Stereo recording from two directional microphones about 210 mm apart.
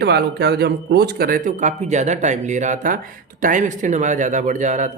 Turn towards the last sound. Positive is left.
turn(degrees=-35)  # may be behind; listen again after turning